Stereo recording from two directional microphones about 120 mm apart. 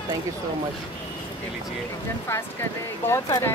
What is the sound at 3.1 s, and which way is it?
Speech, 20° left (ahead or behind).